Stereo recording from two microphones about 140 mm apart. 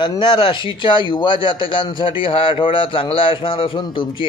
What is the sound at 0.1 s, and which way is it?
A man's voice, 35° left (ahead or behind).